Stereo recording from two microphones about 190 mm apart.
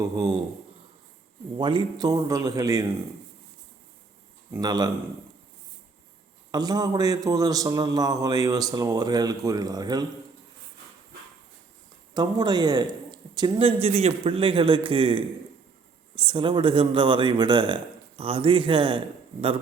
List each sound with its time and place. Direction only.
0.0 s speech: 15° right (ahead or behind)
1.5 s a man's voice: 25° right (ahead or behind)
4.5 s a man's voice: 20° right (ahead or behind)
6.5 s a man's voice: 20° right (ahead or behind)
12.1 s a man's voice: 25° right (ahead or behind)